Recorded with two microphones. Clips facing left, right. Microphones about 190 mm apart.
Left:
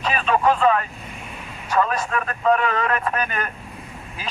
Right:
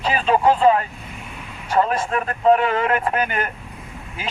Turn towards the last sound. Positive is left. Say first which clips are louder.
# right 2 dB
turn(degrees=-25)  # may be behind; listen again after turning